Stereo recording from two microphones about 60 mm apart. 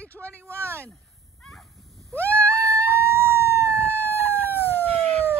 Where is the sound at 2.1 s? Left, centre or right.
Left.